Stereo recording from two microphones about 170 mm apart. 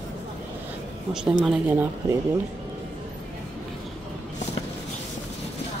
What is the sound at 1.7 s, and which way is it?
Speech, 15° right (ahead or behind).